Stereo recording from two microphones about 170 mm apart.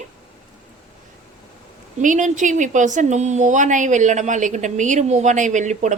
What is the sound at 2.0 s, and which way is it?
A woman's voice, 45° right (ahead or behind).